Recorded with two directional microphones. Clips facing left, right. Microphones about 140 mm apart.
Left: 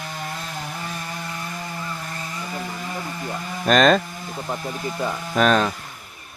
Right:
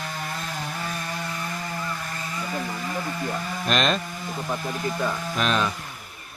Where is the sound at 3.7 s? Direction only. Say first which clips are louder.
Left 8 dB; 50° left (ahead or behind).